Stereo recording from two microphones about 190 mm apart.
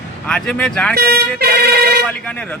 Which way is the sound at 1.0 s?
55° right (ahead or behind).